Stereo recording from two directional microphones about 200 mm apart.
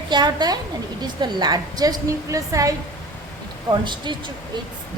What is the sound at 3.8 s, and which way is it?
Speech, 25° right (ahead or behind).